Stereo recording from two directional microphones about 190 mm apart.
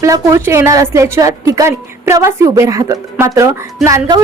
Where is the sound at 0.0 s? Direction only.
15° right (ahead or behind).